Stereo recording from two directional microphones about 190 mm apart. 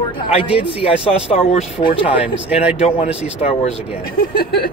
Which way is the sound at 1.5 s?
30° left (ahead or behind).